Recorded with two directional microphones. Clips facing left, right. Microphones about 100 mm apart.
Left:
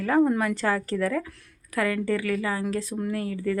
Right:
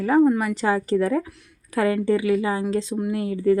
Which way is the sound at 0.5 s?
20° right (ahead or behind).